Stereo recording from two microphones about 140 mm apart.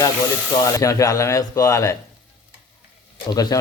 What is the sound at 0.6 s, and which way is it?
A man's voice, 20° left (ahead or behind).